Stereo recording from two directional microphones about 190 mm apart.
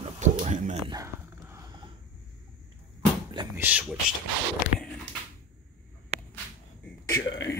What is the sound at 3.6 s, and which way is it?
Speech, 10° right (ahead or behind).